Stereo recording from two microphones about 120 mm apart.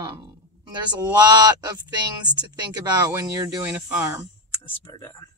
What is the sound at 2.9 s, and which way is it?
Speech, 30° right (ahead or behind).